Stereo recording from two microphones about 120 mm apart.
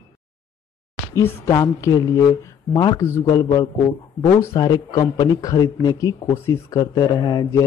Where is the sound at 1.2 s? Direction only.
25° left (ahead or behind).